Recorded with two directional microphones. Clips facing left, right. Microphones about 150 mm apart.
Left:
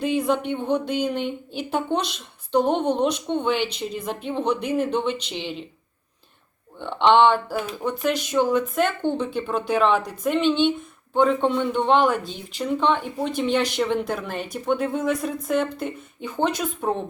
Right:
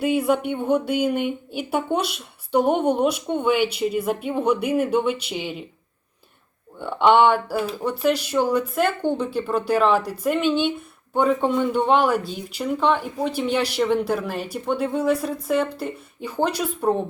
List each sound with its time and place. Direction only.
0.0 s speech: 10° right (ahead or behind)
6.7 s speech: 10° right (ahead or behind)